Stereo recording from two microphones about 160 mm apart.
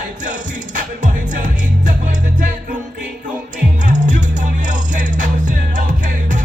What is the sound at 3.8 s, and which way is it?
Music, 55° right (ahead or behind).